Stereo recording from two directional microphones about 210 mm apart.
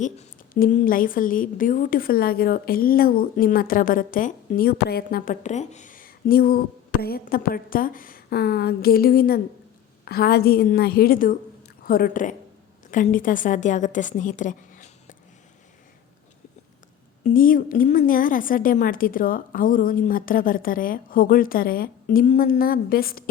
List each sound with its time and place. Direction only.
0.0 s a woman's voice: 40° left (ahead or behind)
17.2 s a woman's voice: 40° left (ahead or behind)